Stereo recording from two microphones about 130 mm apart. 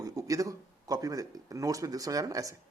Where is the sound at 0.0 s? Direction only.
25° right (ahead or behind).